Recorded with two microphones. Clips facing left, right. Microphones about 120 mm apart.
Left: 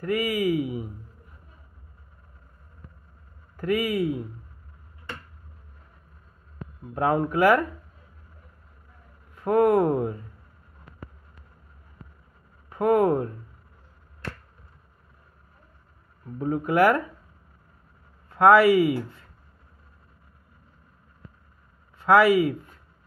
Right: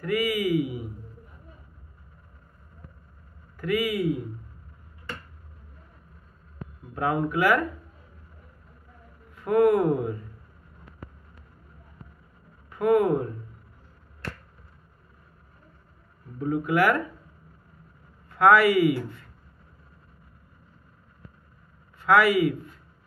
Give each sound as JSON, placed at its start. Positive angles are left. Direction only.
{"t": 0.0, "sound": "speech", "side_deg": 30}
{"t": 3.5, "sound": "speech", "side_deg": 35}
{"t": 7.0, "sound": "speech", "side_deg": 35}
{"t": 9.4, "sound": "speech", "side_deg": 35}
{"t": 12.6, "sound": "speech", "side_deg": 30}
{"t": 16.3, "sound": "speech", "side_deg": 35}
{"t": 18.3, "sound": "speech", "side_deg": 30}
{"t": 22.0, "sound": "speech", "side_deg": 30}